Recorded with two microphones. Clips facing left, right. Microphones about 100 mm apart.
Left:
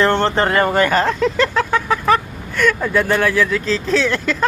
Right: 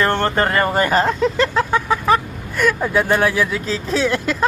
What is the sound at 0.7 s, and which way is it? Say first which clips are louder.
Speech: left 1 dB; 35° right (ahead or behind).